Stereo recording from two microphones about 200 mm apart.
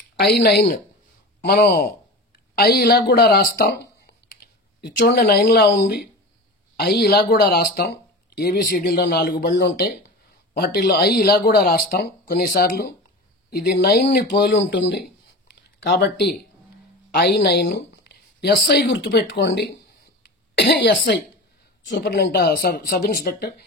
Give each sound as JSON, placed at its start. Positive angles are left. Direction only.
{"t": 0.2, "sound": "speech", "side_deg": 55}
{"t": 9.6, "sound": "speech", "side_deg": 55}
{"t": 15.5, "sound": "a sound", "side_deg": 55}
{"t": 17.1, "sound": "speech", "side_deg": 50}